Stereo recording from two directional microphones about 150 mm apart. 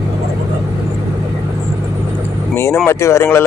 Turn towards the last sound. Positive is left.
turn(degrees=20)  # may be behind; listen again after turning